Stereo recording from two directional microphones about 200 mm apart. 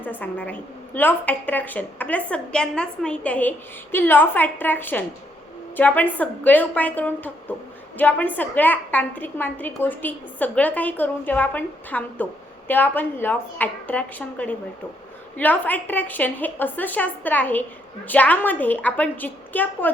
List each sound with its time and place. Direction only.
0.0 s a woman's voice: 10° left (ahead or behind)